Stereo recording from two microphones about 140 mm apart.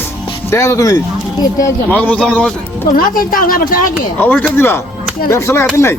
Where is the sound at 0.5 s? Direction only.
20° left (ahead or behind).